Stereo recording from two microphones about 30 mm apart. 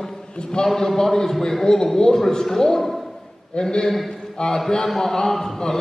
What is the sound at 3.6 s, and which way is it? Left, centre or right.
Speech, left.